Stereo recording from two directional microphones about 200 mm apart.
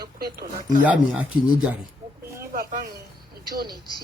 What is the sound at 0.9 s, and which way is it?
Speech, 5° right (ahead or behind).